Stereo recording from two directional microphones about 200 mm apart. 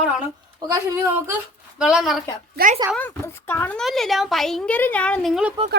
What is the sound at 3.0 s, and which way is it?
A woman's voice, 10° left (ahead or behind).